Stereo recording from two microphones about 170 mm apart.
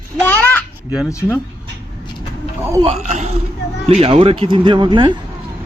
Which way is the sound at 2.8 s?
40° right (ahead or behind).